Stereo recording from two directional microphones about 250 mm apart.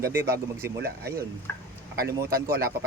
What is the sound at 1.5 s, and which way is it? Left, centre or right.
Speech, centre.